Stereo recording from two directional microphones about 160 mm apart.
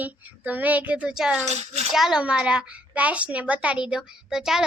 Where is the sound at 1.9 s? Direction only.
5° right (ahead or behind).